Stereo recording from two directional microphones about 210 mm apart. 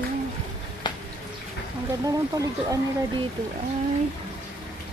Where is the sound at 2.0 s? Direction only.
15° right (ahead or behind).